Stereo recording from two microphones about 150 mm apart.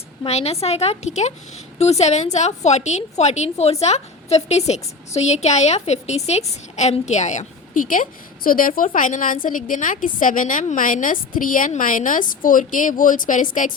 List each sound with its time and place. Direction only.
0.3 s a woman's voice: 45° left (ahead or behind); by 13.7 s 65° left (ahead or behind)